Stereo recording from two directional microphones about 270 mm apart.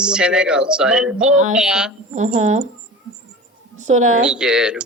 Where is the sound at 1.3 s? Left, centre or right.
Right.